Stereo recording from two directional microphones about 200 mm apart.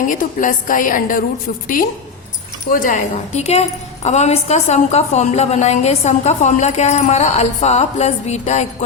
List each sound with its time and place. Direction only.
0.1 s a woman's voice: 40° left (ahead or behind)
2.6 s a woman's voice: 40° left (ahead or behind)